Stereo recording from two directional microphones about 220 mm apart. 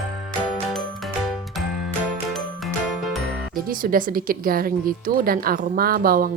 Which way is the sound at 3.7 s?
40° right (ahead or behind).